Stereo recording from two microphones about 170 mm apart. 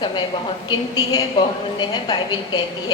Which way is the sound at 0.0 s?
30° left (ahead or behind).